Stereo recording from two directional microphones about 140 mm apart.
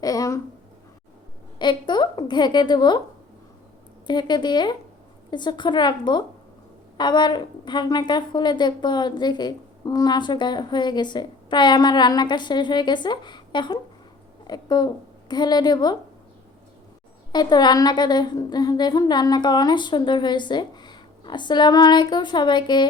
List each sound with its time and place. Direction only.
0.0 s a sound: 25° left (ahead or behind)
1.5 s a woman's voice: 30° left (ahead or behind)
4.0 s a woman's voice: 30° left (ahead or behind)
17.3 s a woman's voice: 30° left (ahead or behind)